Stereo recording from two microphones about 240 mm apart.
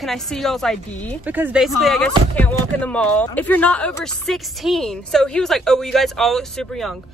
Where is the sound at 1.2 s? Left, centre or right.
Centre.